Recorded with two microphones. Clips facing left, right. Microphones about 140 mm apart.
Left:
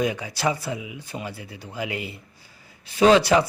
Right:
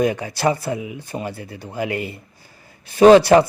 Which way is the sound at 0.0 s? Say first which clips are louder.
Right 5 dB; 50° right (ahead or behind).